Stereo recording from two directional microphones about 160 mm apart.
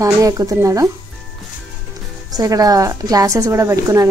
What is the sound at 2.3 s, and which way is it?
A woman's voice, 20° right (ahead or behind).